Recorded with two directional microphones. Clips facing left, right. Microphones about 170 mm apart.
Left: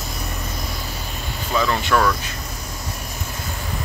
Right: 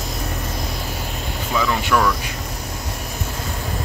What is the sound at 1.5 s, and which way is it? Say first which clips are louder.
Speech: even; 5° right (ahead or behind).